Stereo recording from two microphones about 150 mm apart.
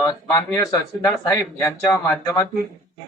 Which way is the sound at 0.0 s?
20° left (ahead or behind).